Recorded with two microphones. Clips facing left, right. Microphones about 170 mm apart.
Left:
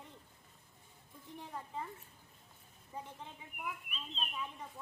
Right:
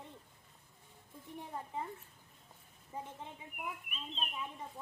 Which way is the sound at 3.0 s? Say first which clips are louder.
Right 2 dB; 20° right (ahead or behind).